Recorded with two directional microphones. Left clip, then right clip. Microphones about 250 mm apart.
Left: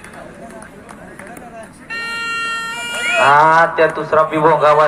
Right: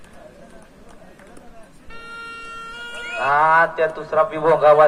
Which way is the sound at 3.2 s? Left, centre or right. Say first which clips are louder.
Left 5 dB; right.